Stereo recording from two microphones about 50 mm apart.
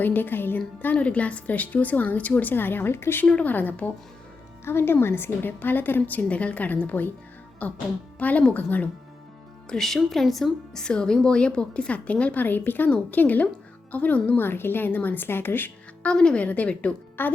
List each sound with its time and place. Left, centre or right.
0.0 s a woman's voice: left
0.9 s a woman's voice: left
3.2 s a woman's voice: left
3.5 s a woman's voice: left
4.6 s a woman's voice: left
6.2 s a woman's voice: left
9.6 s speech: centre
10.8 s a woman's voice: centre; by 14.3 s left
14.3 s a woman's voice: left
16.0 s a woman's voice: centre
17.2 s a woman's voice: left